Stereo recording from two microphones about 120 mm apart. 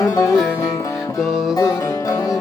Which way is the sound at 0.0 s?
25° left (ahead or behind).